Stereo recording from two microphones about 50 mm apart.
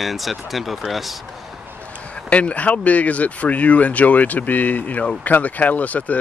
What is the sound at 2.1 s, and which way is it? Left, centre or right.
Speech, left.